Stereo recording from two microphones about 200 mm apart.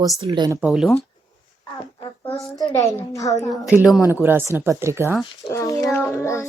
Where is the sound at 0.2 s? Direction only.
20° right (ahead or behind).